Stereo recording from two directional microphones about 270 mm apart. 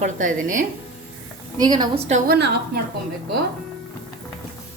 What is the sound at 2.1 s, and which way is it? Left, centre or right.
Speech, right.